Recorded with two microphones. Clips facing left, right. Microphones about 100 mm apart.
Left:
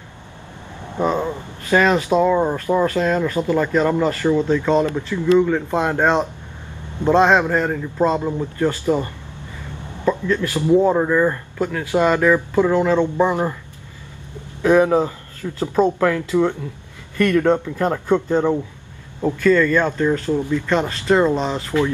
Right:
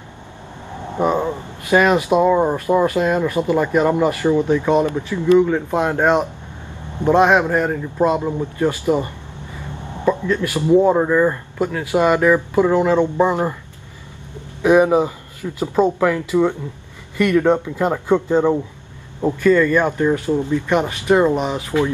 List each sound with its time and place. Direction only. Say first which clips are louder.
0.9 s speech: right 2 dB; 15° right (ahead or behind)
14.6 s speech: right 1 dB; 15° right (ahead or behind)